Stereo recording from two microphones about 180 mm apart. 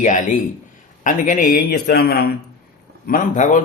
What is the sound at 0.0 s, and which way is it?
A man's voice, 40° left (ahead or behind).